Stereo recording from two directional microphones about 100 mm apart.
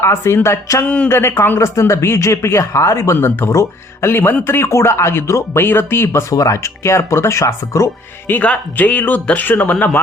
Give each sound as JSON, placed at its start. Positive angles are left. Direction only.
{"t": 0.0, "sound": "speech", "side_deg": 25}
{"t": 0.9, "sound": "speech", "side_deg": 15}
{"t": 1.1, "sound": "speech", "side_deg": 25}
{"t": 8.3, "sound": "speech", "side_deg": 15}